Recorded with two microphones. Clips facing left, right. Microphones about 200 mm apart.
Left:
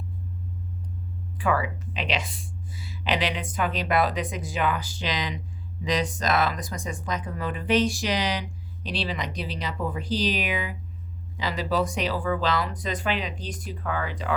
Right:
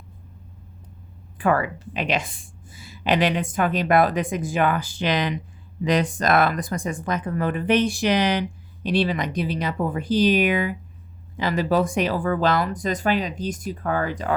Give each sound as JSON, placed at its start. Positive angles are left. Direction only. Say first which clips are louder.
{"t": 1.4, "sound": "speech", "louder": "right 4 dB", "side_deg": -50}